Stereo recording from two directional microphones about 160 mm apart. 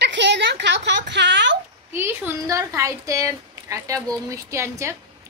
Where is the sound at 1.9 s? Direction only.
15° right (ahead or behind).